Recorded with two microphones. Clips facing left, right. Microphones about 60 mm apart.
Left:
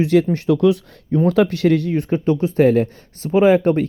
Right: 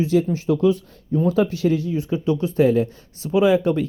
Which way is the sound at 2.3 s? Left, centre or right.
Left.